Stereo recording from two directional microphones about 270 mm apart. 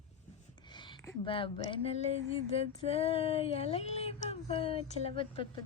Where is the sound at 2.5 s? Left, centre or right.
Left.